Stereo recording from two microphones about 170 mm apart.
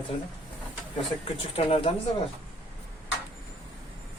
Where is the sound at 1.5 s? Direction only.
35° left (ahead or behind).